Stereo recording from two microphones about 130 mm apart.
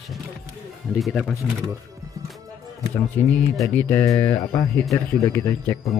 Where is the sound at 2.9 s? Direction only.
20° left (ahead or behind).